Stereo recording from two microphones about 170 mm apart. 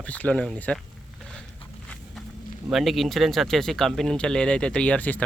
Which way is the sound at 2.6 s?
Centre (ahead or behind).